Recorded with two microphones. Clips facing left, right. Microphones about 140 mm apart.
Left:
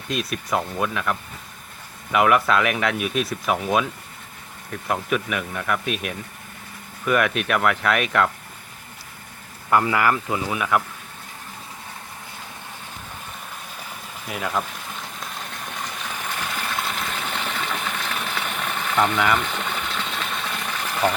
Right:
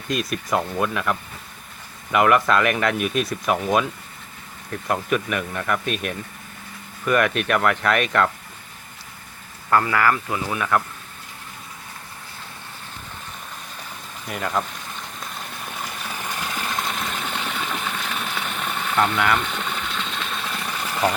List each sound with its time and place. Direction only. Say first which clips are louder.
0.1 s speech: right 1 dB; centre (ahead or behind)
2.1 s speech: right 1 dB; centre (ahead or behind)
4.9 s speech: right 1 dB; centre (ahead or behind)
9.6 s speech: even; 15° left (ahead or behind)
14.3 s speech: right 1 dB; 5° left (ahead or behind)
15.2 s a sound: even; 5° right (ahead or behind)
18.7 s engine: even; centre (ahead or behind)
20.6 s a sound: even; 10° right (ahead or behind)